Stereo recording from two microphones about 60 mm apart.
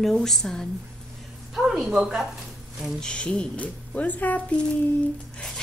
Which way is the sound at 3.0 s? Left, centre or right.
Centre.